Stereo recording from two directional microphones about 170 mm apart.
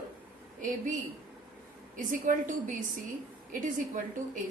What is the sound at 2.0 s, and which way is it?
A woman's voice, 50° right (ahead or behind).